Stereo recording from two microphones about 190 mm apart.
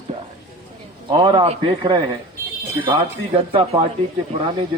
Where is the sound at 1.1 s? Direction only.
25° right (ahead or behind).